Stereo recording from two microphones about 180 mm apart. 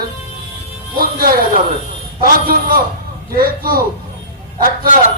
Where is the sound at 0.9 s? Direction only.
55° right (ahead or behind).